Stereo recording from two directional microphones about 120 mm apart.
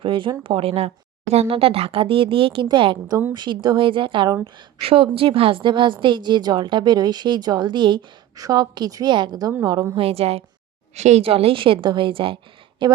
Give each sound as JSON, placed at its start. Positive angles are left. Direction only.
{"t": 0.0, "sound": "a woman's voice", "side_deg": -45}
{"t": 10.0, "sound": "speech", "side_deg": -55}
{"t": 10.9, "sound": "speech", "side_deg": -70}